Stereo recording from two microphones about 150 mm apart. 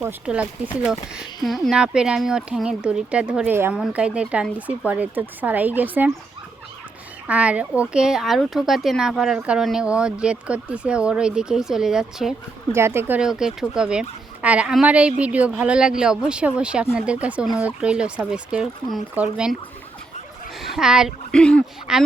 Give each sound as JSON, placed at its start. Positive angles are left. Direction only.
{"t": 0.0, "sound": "a woman's voice", "side_deg": -10}
{"t": 7.3, "sound": "a woman's voice", "side_deg": -10}
{"t": 12.7, "sound": "speech", "side_deg": -15}
{"t": 20.6, "sound": "a woman's voice", "side_deg": 0}